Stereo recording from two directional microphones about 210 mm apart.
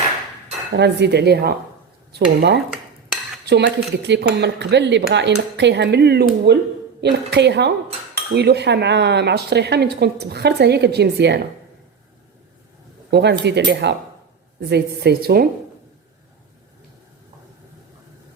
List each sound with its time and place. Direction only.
0.8 s speech: 55° right (ahead or behind)
13.1 s speech: 55° right (ahead or behind)